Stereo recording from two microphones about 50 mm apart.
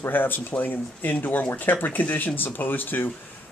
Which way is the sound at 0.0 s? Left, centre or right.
Left.